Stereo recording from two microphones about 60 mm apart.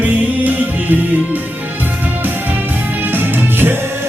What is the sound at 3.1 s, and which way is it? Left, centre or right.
Music, right.